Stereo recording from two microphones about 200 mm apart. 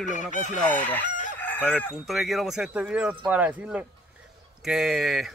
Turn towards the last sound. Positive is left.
turn(degrees=0)  # may be behind; listen again after turning